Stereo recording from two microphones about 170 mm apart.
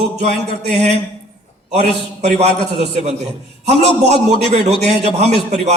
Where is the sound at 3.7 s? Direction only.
40° right (ahead or behind).